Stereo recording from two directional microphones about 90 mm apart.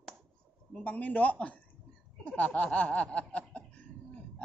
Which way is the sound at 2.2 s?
10° left (ahead or behind).